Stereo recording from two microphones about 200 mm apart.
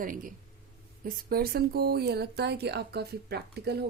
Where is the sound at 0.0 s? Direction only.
45° right (ahead or behind).